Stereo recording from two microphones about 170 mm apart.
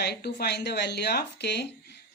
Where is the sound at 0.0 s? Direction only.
70° left (ahead or behind).